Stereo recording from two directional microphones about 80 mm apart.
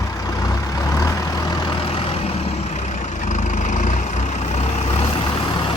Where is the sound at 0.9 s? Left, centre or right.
Left.